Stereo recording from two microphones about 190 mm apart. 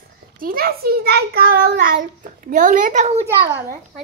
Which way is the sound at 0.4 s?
50° right (ahead or behind).